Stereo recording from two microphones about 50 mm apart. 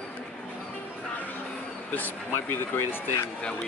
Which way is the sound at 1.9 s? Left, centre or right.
Left.